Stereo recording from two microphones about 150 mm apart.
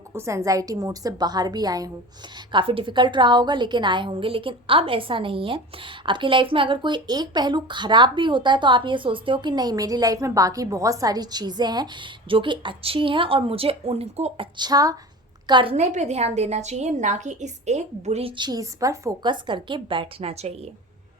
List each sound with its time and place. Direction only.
0.1 s a woman's voice: 20° right (ahead or behind); by 14.4 s 45° right (ahead or behind)
14.5 s a woman's voice: 25° right (ahead or behind)
15.7 s a woman's voice: 50° right (ahead or behind)